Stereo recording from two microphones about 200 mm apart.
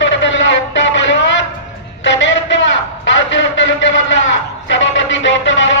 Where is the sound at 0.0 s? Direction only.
65° left (ahead or behind).